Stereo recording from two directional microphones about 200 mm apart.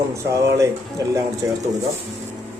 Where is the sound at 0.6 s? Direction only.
15° right (ahead or behind).